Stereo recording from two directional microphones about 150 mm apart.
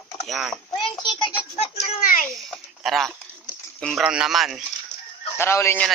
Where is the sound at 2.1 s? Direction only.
70° left (ahead or behind).